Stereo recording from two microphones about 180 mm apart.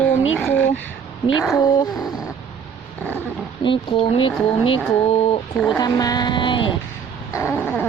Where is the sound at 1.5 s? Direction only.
20° left (ahead or behind).